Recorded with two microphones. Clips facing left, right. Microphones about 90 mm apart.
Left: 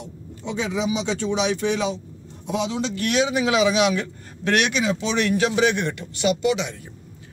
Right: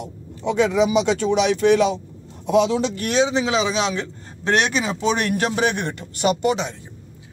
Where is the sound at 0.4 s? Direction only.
60° right (ahead or behind).